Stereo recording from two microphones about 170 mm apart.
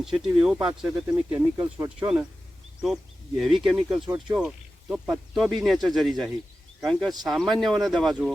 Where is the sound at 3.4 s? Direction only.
Centre (ahead or behind).